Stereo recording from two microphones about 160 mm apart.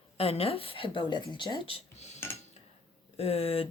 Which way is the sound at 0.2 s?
40° left (ahead or behind).